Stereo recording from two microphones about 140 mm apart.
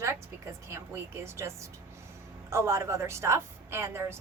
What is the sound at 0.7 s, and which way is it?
A woman's voice, 20° right (ahead or behind).